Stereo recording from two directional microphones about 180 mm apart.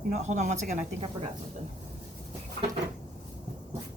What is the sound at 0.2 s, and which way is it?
A woman's voice, 40° right (ahead or behind).